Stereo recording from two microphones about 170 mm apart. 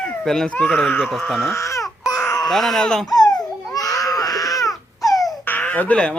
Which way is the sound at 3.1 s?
25° left (ahead or behind).